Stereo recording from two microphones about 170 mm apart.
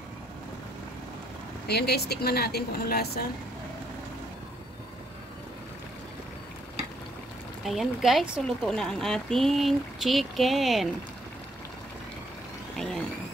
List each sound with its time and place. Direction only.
1.7 s speech: 70° left (ahead or behind)
7.6 s speech: centre (ahead or behind)